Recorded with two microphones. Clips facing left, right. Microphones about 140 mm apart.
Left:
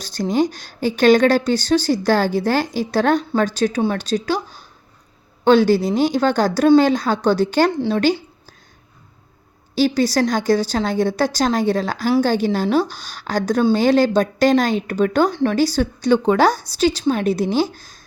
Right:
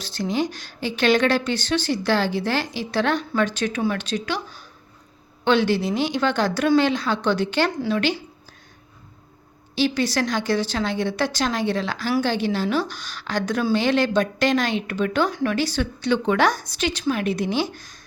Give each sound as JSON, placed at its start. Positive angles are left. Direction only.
{"t": 0.0, "sound": "a woman's voice", "side_deg": 45}
{"t": 5.5, "sound": "speech", "side_deg": 40}
{"t": 9.7, "sound": "speech", "side_deg": 40}
{"t": 15.3, "sound": "speech", "side_deg": 30}